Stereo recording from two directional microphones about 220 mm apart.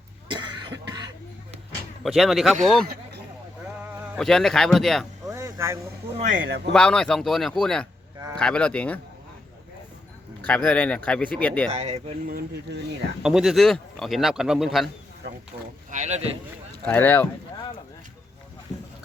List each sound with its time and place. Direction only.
0.3 s cough: 20° right (ahead or behind)
2.0 s speech: centre (ahead or behind)
2.8 s a sound: 40° right (ahead or behind)
3.8 s sheep: 10° right (ahead or behind)
4.2 s speech: centre (ahead or behind)
5.2 s a sound: 15° right (ahead or behind)
6.1 s speech: 35° right (ahead or behind)
6.7 s speech: 5° left (ahead or behind)
10.4 s speech: 5° left (ahead or behind)
11.7 s speech: 30° right (ahead or behind)
12.3 s speech: 45° right (ahead or behind)
13.2 s speech: centre (ahead or behind)
15.9 s speech: 30° right (ahead or behind)
16.8 s speech: 10° left (ahead or behind)